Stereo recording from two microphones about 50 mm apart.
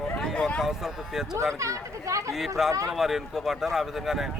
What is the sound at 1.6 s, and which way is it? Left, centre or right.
Speech, right.